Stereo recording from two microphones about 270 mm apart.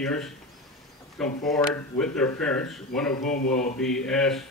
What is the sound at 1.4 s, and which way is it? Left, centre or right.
Speech, centre.